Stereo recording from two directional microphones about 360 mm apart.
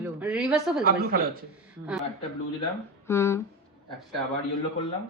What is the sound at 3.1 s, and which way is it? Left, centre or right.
Speech, centre.